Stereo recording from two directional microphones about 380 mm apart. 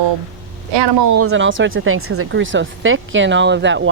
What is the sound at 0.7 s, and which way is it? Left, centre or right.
Speech, right.